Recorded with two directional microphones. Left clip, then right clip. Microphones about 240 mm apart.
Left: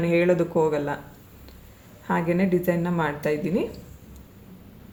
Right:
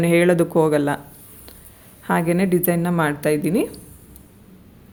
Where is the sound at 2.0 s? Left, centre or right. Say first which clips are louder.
Right 4 dB; right.